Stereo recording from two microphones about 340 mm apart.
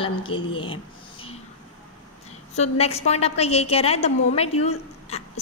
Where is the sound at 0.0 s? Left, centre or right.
Centre.